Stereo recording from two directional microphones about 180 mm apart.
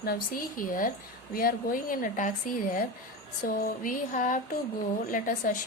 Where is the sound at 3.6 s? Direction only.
50° left (ahead or behind).